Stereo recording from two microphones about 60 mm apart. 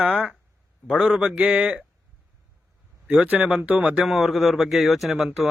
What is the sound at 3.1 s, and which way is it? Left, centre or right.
Speech, right.